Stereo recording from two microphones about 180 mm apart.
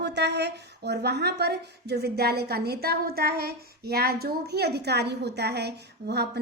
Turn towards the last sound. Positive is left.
turn(degrees=-65)  # may be behind; listen again after turning